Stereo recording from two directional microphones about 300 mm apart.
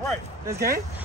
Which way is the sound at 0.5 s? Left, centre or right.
Right.